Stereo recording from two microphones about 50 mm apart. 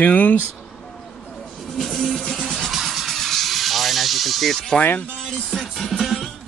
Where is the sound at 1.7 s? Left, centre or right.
Centre.